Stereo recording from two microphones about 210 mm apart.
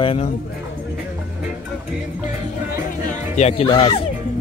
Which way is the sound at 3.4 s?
30° left (ahead or behind).